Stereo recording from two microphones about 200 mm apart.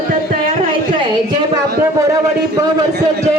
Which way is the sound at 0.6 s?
25° right (ahead or behind).